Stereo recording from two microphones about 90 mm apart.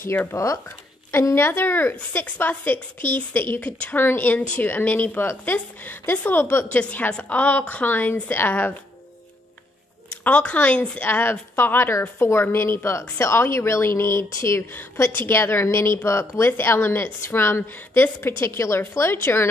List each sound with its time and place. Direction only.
0.0 s a woman's voice: 25° left (ahead or behind)
10.0 s a woman's voice: 15° left (ahead or behind)